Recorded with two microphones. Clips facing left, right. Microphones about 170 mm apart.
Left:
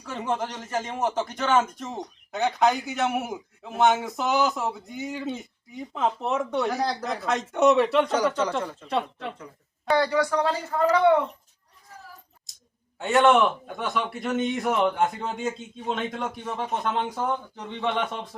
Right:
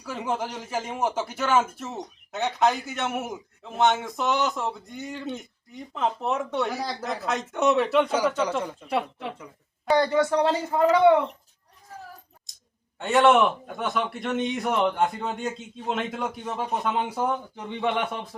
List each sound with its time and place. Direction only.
0.0 s a man's voice: 5° right (ahead or behind)
9.9 s speech: 20° right (ahead or behind)
13.0 s speech: centre (ahead or behind)